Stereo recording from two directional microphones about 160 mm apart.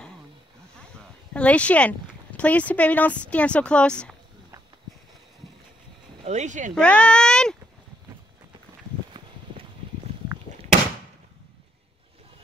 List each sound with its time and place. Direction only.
1.3 s speech: 10° left (ahead or behind)
6.2 s speech: 50° right (ahead or behind)
6.7 s speech: 5° left (ahead or behind)
9.1 s clip-clop: 35° right (ahead or behind)